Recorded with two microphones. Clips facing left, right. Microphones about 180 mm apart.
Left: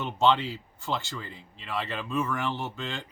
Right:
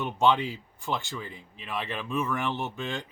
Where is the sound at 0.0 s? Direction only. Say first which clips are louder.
Even; 15° right (ahead or behind).